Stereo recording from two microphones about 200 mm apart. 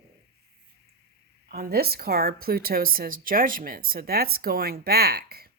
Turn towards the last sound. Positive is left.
turn(degrees=-50)  # may be behind; listen again after turning